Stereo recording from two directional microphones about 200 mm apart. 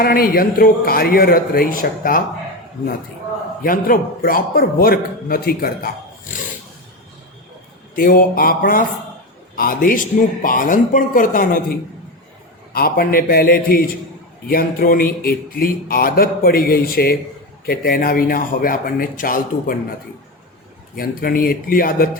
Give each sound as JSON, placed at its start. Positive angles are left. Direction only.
{"t": 0.0, "sound": "speech", "side_deg": 45}
{"t": 3.6, "sound": "speech", "side_deg": 45}
{"t": 7.9, "sound": "speech", "side_deg": 45}
{"t": 12.7, "sound": "speech", "side_deg": 45}
{"t": 20.9, "sound": "speech", "side_deg": 50}